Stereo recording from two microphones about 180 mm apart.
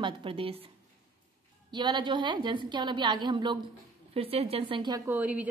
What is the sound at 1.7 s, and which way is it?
A woman's voice, 25° right (ahead or behind).